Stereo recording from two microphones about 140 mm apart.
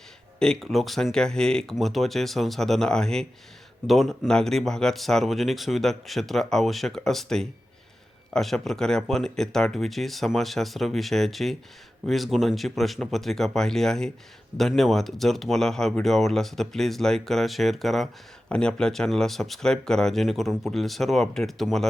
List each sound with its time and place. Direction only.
0.3 s speech: 5° left (ahead or behind)